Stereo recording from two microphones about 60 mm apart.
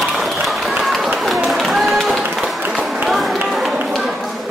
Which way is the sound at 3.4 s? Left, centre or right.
Centre.